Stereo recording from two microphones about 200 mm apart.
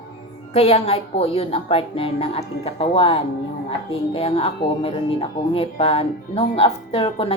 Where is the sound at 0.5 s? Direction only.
30° left (ahead or behind).